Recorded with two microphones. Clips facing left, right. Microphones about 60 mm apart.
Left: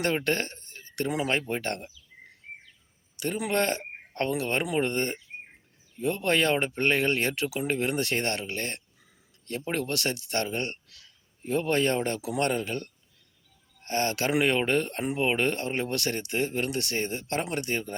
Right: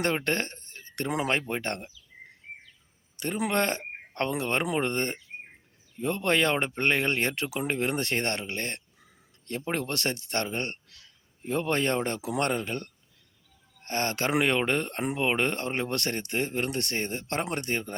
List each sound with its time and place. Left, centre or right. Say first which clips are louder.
0.3 s speech: left 1 dB; right
0.9 s speech: even; right
3.2 s speech: even; right
15.0 s speech: left 1 dB; right